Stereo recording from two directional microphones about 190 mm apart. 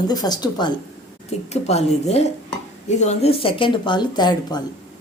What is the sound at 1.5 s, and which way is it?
A woman's voice, 35° left (ahead or behind).